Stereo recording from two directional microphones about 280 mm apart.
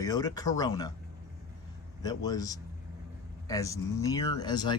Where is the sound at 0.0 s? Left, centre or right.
Centre.